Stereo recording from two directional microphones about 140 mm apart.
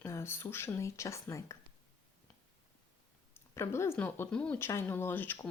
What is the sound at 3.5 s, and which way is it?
Speech, 20° left (ahead or behind).